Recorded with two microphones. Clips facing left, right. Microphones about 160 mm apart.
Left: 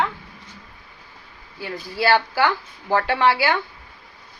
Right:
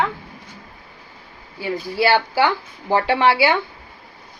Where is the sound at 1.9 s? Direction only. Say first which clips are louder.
Right 1 dB; 20° right (ahead or behind).